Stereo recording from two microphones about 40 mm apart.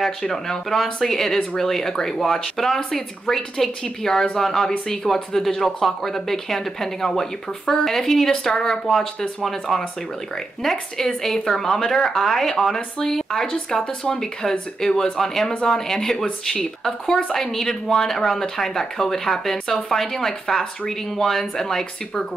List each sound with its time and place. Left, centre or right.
0.0 s speech: centre